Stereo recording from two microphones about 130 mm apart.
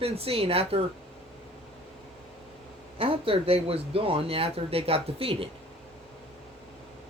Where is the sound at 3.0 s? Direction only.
45° right (ahead or behind).